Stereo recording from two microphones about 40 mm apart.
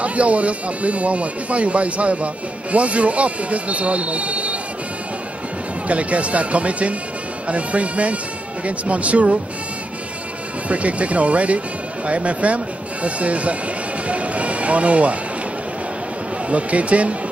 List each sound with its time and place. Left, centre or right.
0.0 s speech: right
5.9 s speech: right
10.7 s speech: right
16.4 s speech: right